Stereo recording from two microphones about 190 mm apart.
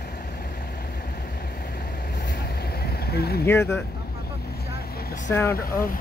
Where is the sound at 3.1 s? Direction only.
55° left (ahead or behind).